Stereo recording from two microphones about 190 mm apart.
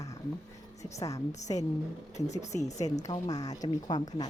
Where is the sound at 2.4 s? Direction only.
15° left (ahead or behind).